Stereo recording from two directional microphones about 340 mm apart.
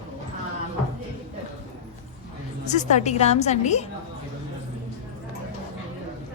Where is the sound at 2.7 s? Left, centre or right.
Left.